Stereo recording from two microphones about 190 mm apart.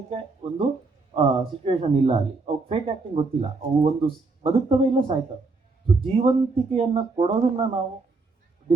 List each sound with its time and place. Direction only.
0.4 s speech: 30° right (ahead or behind)